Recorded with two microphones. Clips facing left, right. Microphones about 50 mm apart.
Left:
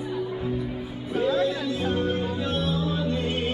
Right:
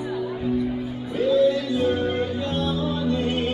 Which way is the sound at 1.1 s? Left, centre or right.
Left.